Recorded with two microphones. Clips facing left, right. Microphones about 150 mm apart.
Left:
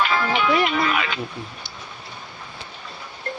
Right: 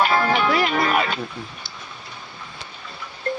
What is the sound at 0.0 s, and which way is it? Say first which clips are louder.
Speech: right 2 dB; 40° right (ahead or behind).